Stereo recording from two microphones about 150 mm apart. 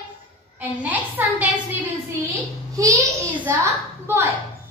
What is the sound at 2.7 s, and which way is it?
A child's voice, 20° right (ahead or behind).